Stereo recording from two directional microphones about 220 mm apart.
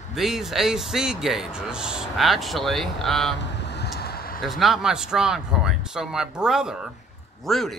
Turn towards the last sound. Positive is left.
turn(degrees=0)  # may be behind; listen again after turning